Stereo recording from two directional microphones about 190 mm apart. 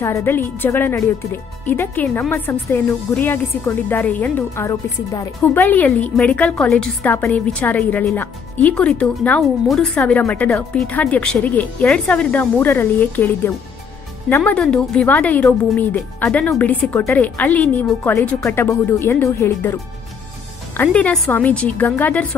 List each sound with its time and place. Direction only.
0.0 s speech: 10° left (ahead or behind)